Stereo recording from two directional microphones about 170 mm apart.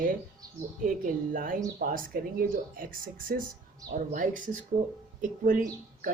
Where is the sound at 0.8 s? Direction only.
50° right (ahead or behind).